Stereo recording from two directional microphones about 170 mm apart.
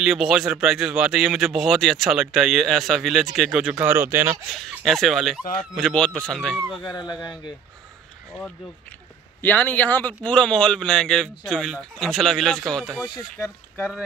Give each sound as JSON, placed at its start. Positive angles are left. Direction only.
{"t": 0.0, "sound": "a man's voice", "side_deg": 0}
{"t": 4.5, "sound": "a man's voice", "side_deg": 0}
{"t": 6.8, "sound": "speech", "side_deg": 25}
{"t": 9.4, "sound": "a man's voice", "side_deg": 10}
{"t": 13.0, "sound": "speech", "side_deg": 25}